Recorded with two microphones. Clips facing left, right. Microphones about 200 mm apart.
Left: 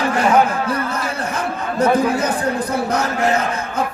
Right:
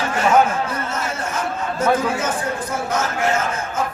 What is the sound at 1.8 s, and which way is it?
A man's voice, 35° left (ahead or behind).